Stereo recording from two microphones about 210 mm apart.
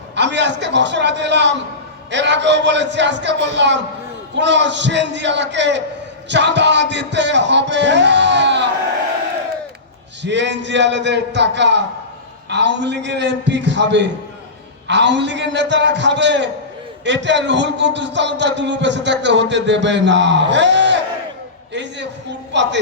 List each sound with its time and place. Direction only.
0.2 s a man's voice: 55° right (ahead or behind)
10.2 s a man's voice: 55° right (ahead or behind)
21.7 s a sound: 55° right (ahead or behind)
22.5 s a man's voice: 55° right (ahead or behind)